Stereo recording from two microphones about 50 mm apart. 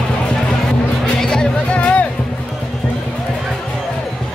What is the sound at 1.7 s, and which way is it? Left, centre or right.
Music, left.